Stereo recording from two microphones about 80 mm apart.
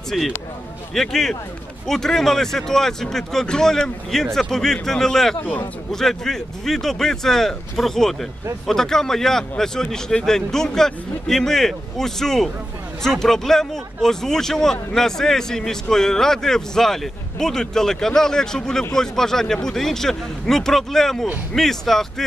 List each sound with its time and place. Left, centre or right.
0.1 s speech: centre
5.4 s a man's voice: left
5.9 s speech: centre